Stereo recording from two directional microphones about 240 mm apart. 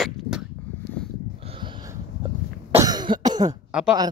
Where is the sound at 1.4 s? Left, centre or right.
Right.